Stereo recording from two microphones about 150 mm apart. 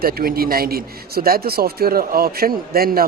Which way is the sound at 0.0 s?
80° right.